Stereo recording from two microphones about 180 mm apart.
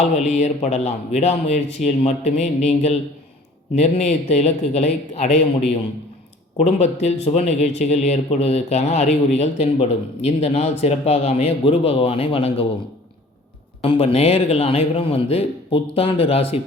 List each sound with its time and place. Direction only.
0.0 s a man's voice: 40° left (ahead or behind)
13.8 s a man's voice: 30° left (ahead or behind)